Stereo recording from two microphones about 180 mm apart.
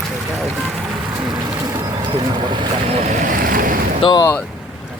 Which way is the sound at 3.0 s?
45° right (ahead or behind).